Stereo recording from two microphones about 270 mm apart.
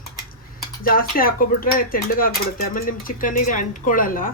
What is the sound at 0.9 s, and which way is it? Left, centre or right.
Speech, left.